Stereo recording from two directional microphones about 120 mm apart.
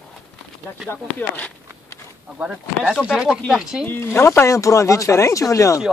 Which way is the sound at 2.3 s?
10° right (ahead or behind).